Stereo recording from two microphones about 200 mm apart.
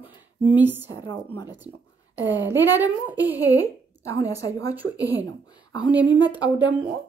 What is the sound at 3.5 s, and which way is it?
A woman's voice, 15° left (ahead or behind).